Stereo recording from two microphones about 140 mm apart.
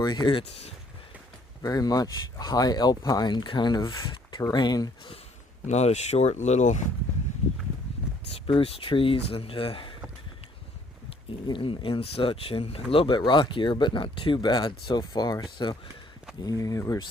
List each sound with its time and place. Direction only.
0.0 s speech: 30° left (ahead or behind)
1.6 s speech: 25° left (ahead or behind)
5.6 s speech: 55° left (ahead or behind)
8.3 s speech: 45° left (ahead or behind)
11.4 s speech: 35° left (ahead or behind)